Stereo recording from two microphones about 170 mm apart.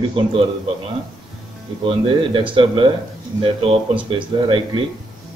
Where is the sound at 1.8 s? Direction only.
30° right (ahead or behind).